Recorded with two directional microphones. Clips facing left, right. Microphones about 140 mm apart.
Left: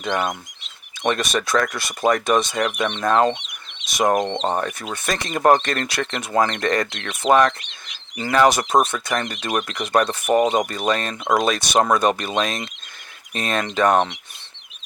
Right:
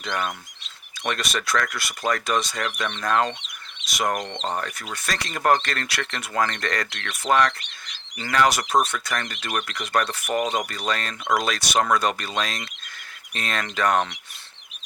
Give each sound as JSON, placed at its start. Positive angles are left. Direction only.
{"t": 0.0, "sound": "speech", "side_deg": 20}